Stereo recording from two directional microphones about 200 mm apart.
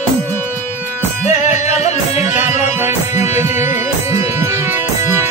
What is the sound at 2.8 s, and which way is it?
Music, 15° right (ahead or behind).